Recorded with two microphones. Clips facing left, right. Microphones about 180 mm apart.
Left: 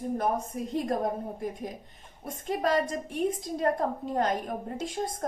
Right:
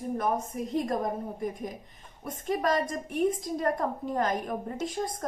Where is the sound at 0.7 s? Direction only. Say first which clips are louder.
Even; 30° left (ahead or behind).